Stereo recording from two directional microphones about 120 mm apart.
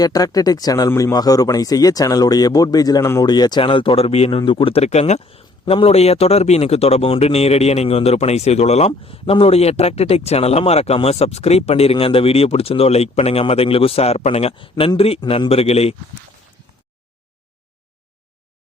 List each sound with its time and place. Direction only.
0.0 s speech: 30° left (ahead or behind); by 4.3 s 60° left (ahead or behind)
4.3 s speech: 40° left (ahead or behind); by 8.9 s 65° left (ahead or behind)
8.9 s speech: 50° left (ahead or behind)